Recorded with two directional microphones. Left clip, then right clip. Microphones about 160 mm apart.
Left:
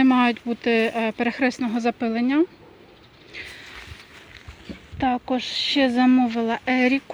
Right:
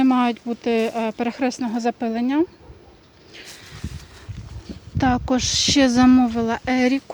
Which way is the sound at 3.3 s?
Centre (ahead or behind).